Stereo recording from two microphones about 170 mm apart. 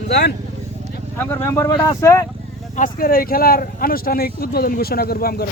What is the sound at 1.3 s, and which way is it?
Speech, 15° left (ahead or behind).